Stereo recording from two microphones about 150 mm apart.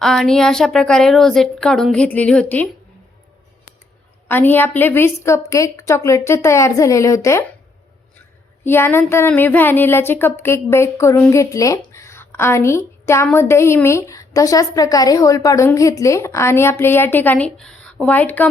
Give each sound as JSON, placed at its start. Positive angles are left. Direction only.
{"t": 0.0, "sound": "a woman's voice", "side_deg": 5}
{"t": 4.3, "sound": "a woman's voice", "side_deg": 15}
{"t": 8.6, "sound": "a woman's voice", "side_deg": 15}